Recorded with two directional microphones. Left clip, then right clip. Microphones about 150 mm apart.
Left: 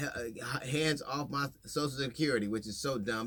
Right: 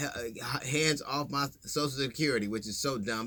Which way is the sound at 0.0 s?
25° right (ahead or behind).